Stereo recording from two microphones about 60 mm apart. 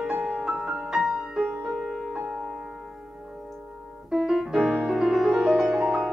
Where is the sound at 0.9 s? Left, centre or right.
Centre.